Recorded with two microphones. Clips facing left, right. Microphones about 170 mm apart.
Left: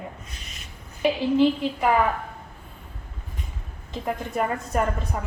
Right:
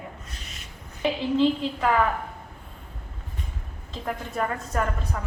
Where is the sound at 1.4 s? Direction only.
15° left (ahead or behind).